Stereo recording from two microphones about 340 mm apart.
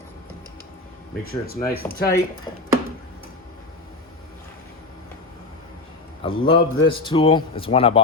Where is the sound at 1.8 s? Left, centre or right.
Centre.